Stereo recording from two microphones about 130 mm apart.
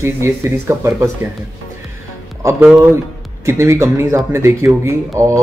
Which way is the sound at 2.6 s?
10° right (ahead or behind).